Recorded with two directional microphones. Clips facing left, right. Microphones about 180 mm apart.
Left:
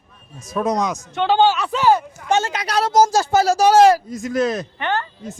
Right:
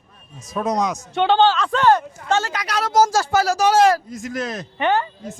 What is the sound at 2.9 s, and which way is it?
Speech, 20° left (ahead or behind).